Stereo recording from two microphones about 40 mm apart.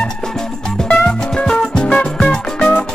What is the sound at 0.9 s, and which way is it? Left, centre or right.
Music, left.